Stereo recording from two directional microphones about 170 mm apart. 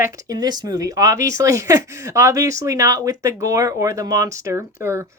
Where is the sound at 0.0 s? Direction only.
20° right (ahead or behind).